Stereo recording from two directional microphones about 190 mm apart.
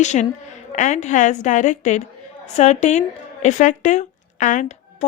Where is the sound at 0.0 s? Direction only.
40° left (ahead or behind).